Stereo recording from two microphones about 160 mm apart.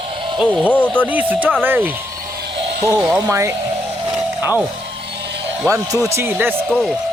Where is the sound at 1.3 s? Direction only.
10° right (ahead or behind).